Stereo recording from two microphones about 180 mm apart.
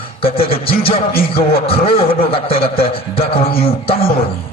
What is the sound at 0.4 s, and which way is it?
A man's voice, 30° left (ahead or behind).